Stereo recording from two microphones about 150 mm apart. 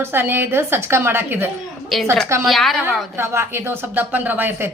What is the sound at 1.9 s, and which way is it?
Speech, centre (ahead or behind).